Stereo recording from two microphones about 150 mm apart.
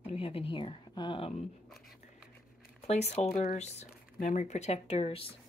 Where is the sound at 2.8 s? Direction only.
45° left (ahead or behind).